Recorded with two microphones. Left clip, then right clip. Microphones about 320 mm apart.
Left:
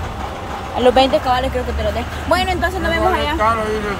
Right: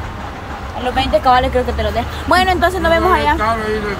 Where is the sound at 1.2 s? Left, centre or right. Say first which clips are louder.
Right 5 dB; centre.